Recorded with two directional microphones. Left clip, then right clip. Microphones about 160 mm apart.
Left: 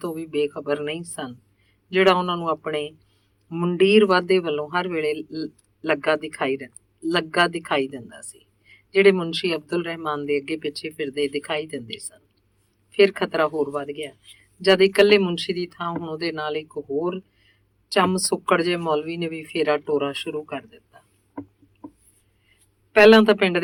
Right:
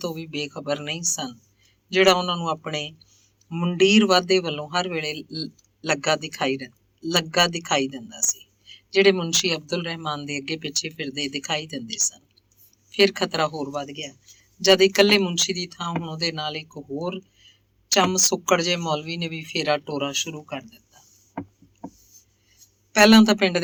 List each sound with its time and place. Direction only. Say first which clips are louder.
0.0 s a man's voice: left 5 dB; 25° right (ahead or behind)
22.9 s a man's voice: left 3 dB; 25° right (ahead or behind)